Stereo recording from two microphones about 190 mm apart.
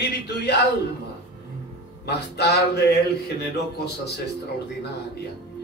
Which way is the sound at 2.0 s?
60° left (ahead or behind).